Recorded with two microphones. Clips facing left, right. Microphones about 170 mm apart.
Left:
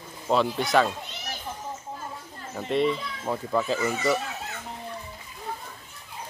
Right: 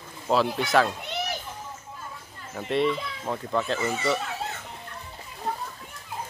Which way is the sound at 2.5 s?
Centre (ahead or behind).